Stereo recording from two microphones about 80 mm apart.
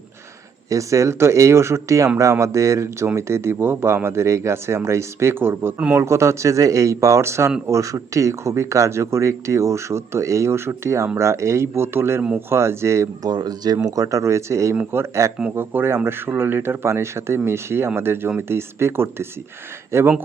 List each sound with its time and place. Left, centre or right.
0.7 s speech: right
13.2 s speech: right
13.8 s speech: right